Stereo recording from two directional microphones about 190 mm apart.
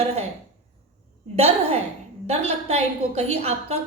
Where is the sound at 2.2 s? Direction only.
35° right (ahead or behind).